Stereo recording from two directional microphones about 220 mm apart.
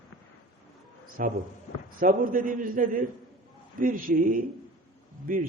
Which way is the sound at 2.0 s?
40° right (ahead or behind).